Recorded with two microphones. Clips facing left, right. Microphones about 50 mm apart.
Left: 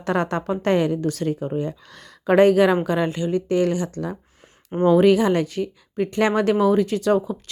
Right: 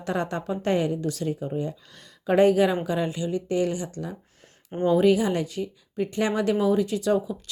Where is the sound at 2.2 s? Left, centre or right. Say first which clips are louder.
Left 4 dB; left.